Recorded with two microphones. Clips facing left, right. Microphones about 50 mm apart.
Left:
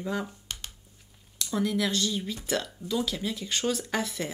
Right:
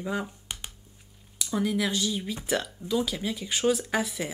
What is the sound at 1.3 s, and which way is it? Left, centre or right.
Speech, centre.